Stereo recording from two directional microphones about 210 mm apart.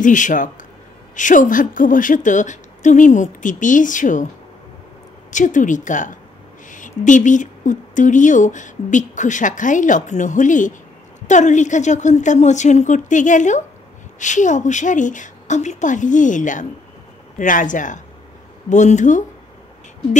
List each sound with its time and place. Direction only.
0.0 s a woman's voice: 35° left (ahead or behind)
5.3 s a woman's voice: 40° left (ahead or behind)